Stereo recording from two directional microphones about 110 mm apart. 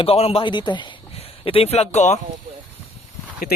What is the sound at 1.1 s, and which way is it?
Speech, 60° left (ahead or behind).